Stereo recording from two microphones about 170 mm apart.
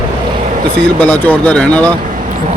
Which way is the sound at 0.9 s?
10° left (ahead or behind).